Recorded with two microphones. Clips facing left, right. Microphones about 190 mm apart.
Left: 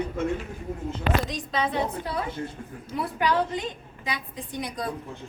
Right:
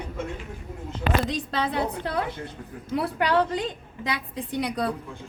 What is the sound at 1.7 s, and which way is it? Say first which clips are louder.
A woman's voice: right 1 dB; 65° right (ahead or behind).